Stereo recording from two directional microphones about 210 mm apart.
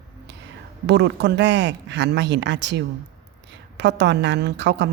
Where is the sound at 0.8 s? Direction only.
55° right (ahead or behind).